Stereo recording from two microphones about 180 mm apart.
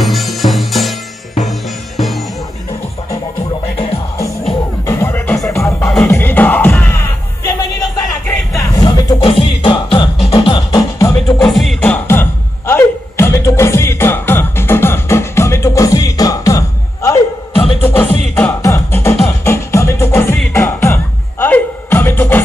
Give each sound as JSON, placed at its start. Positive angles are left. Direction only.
{"t": 0.0, "sound": "music", "side_deg": 0}
{"t": 4.8, "sound": "music", "side_deg": 15}
{"t": 11.4, "sound": "music", "side_deg": 0}